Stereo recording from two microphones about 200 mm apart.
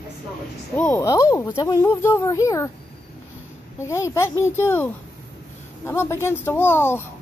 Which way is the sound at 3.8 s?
15° left (ahead or behind).